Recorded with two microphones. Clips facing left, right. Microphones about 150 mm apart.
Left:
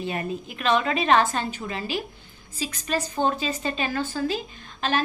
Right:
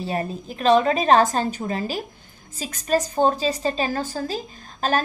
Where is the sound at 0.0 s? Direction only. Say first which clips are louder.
Right 2 dB; 35° right (ahead or behind).